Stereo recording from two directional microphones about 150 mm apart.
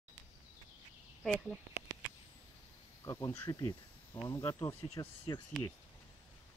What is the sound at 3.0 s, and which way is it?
Speech, 20° left (ahead or behind).